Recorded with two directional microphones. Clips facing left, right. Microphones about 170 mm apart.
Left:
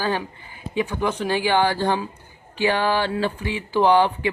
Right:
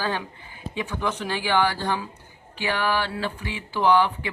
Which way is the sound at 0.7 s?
45° left (ahead or behind).